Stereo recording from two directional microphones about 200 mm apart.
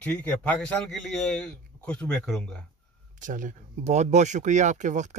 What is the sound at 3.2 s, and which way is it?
Speech, 40° right (ahead or behind).